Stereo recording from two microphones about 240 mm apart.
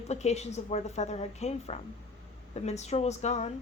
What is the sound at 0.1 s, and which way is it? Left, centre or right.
Speech, left.